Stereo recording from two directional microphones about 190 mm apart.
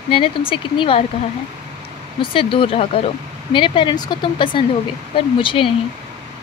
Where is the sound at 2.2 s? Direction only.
30° left (ahead or behind).